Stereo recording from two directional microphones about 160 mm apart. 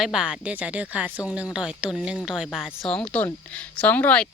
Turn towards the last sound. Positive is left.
turn(degrees=10)  # may be behind; listen again after turning